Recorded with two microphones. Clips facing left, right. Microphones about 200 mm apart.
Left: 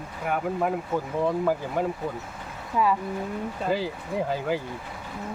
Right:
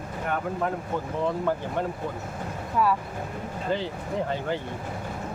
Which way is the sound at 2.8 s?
5° left (ahead or behind).